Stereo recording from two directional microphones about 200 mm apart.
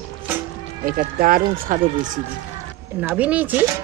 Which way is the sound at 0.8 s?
45° right (ahead or behind).